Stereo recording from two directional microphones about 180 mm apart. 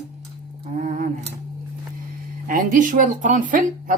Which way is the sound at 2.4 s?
50° right (ahead or behind).